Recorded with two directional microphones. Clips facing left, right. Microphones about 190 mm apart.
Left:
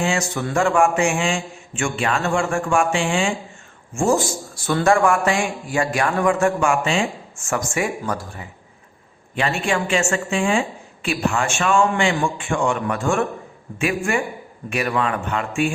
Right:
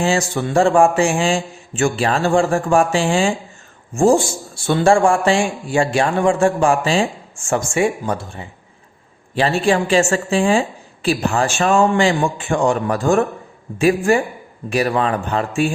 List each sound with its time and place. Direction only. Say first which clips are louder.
0.0 s a woman's voice: right 4 dB; 35° right (ahead or behind)